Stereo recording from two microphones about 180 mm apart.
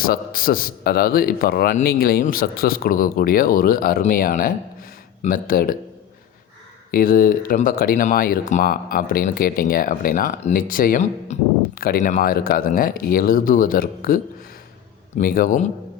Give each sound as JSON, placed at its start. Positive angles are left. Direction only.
{"t": 0.0, "sound": "speech", "side_deg": 55}
{"t": 6.9, "sound": "speech", "side_deg": 50}
{"t": 15.2, "sound": "speech", "side_deg": 55}